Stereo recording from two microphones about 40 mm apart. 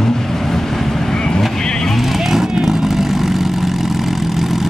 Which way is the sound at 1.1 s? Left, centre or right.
Left.